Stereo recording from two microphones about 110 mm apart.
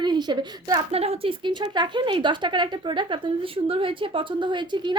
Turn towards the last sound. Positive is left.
turn(degrees=-45)  # may be behind; listen again after turning